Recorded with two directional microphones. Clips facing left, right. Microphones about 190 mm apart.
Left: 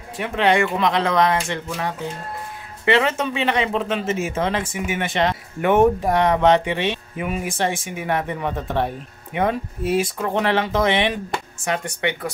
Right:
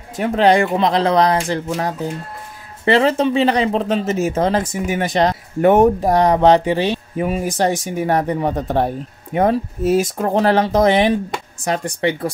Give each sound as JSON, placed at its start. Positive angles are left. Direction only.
{"t": 0.2, "sound": "a man's voice", "side_deg": -35}